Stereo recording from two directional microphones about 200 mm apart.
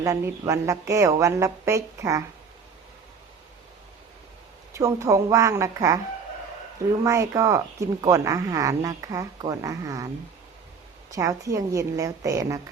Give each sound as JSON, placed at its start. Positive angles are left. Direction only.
{"t": 0.0, "sound": "speech", "side_deg": -15}
{"t": 4.7, "sound": "speech", "side_deg": -15}
{"t": 7.0, "sound": "speech", "side_deg": -15}
{"t": 11.1, "sound": "speech", "side_deg": -15}